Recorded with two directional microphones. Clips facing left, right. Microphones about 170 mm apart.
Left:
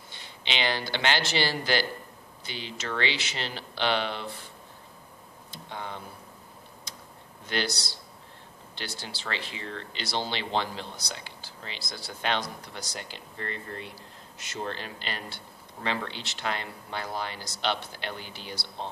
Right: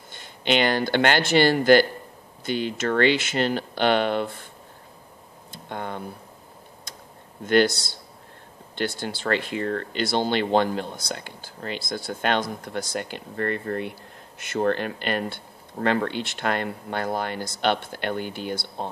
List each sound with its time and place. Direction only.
0.1 s speech: 50° right (ahead or behind)
5.5 s speech: 50° right (ahead or behind)
7.4 s speech: 50° right (ahead or behind)